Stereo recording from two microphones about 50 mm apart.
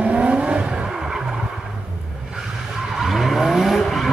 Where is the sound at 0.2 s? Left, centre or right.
Right.